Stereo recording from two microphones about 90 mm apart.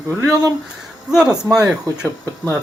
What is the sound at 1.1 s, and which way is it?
Speech, 5° right (ahead or behind).